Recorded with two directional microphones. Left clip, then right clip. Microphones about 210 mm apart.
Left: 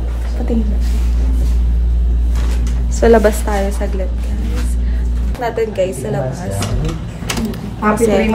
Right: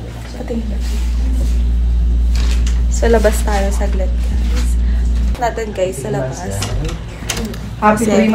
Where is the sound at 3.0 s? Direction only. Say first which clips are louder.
Left 3 dB; 20° left (ahead or behind).